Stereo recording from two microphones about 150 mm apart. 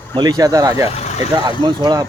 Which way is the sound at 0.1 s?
30° right (ahead or behind).